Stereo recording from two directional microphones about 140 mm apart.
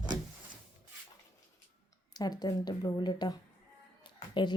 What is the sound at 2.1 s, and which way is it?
A woman's voice, 30° left (ahead or behind).